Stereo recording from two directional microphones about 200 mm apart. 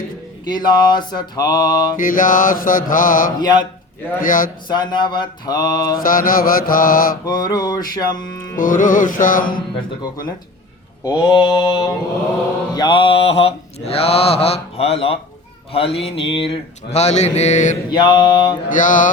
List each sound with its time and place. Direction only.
0.4 s mantra: 20° left (ahead or behind)
2.0 s mantra: 45° left (ahead or behind)
4.7 s mantra: 20° left (ahead or behind)
6.0 s mantra: 45° left (ahead or behind)
7.3 s mantra: 20° left (ahead or behind)
8.5 s mantra: 40° left (ahead or behind)
11.0 s mantra: 20° left (ahead or behind); by 17.7 s 35° left (ahead or behind)
17.9 s mantra: 20° left (ahead or behind)
18.7 s mantra: 40° left (ahead or behind)